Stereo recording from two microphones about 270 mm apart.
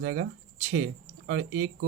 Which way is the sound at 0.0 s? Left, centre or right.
Right.